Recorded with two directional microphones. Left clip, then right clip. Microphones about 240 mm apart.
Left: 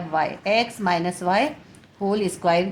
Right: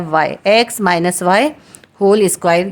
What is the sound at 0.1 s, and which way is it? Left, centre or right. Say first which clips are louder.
A woman's voice: right 9 dB; right.